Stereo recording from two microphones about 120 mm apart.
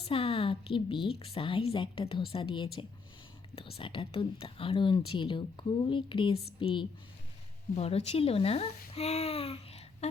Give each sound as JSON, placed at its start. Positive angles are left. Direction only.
{"t": 0.1, "sound": "a sound", "side_deg": 50}
{"t": 1.1, "sound": "speech", "side_deg": 55}
{"t": 7.8, "sound": "speech", "side_deg": 60}